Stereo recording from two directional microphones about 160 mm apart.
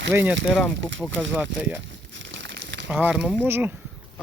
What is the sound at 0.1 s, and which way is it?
Speech, 15° right (ahead or behind).